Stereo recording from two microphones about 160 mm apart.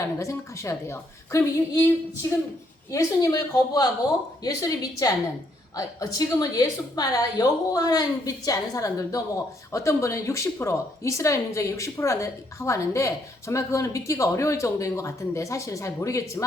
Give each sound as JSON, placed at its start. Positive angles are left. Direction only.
{"t": 0.0, "sound": "a woman's voice", "side_deg": 20}